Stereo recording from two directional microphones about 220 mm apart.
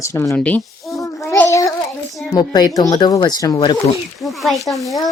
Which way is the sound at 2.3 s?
20° left (ahead or behind).